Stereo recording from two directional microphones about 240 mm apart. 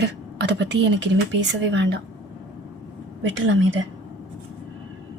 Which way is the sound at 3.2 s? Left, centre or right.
Right.